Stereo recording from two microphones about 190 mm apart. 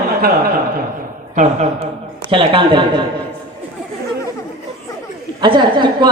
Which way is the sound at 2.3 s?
25° right (ahead or behind).